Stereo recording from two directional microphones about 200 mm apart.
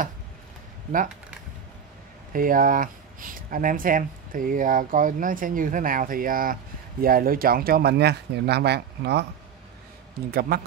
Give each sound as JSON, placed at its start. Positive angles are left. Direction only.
{"t": 2.3, "sound": "speech", "side_deg": -45}
{"t": 10.5, "sound": "speech", "side_deg": -50}